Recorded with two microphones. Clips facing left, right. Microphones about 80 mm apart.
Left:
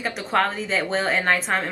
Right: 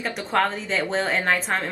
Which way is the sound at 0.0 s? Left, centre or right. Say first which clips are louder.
Left 1 dB; centre.